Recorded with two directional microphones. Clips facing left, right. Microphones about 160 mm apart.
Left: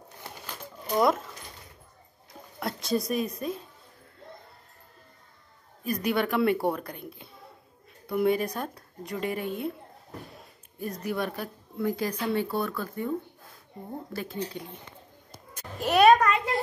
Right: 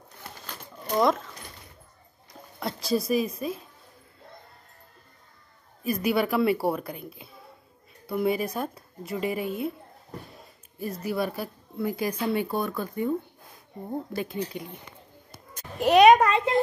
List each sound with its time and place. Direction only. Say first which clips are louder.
0.8 s speech: right 1 dB; 5° left (ahead or behind)
2.6 s a woman's voice: right 1 dB; centre (ahead or behind)
5.9 s speech: right 2 dB; 5° right (ahead or behind)
10.8 s speech: right 2 dB; 5° right (ahead or behind)
14.1 s a child's voice: right 3 dB; 15° right (ahead or behind)
16.2 s a child's voice: right 4 dB; 30° right (ahead or behind)